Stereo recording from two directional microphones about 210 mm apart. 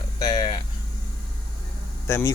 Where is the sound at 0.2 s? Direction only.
20° left (ahead or behind).